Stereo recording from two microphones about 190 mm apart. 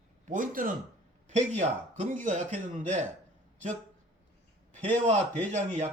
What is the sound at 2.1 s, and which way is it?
Speech, 40° right (ahead or behind).